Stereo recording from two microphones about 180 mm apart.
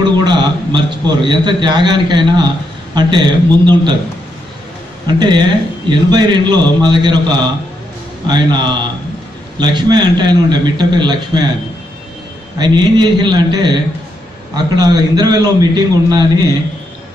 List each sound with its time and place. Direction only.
0.2 s a man's voice: 25° right (ahead or behind)
5.0 s a man's voice: 25° right (ahead or behind)
12.5 s a man's voice: 25° right (ahead or behind)